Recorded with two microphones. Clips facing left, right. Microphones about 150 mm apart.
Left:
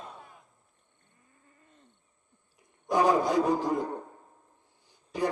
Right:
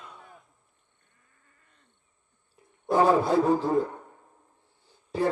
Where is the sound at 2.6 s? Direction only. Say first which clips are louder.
Right 3 dB; 15° left (ahead or behind).